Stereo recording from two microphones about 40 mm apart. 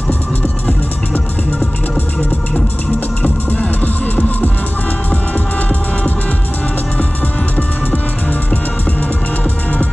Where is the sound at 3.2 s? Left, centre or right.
Left.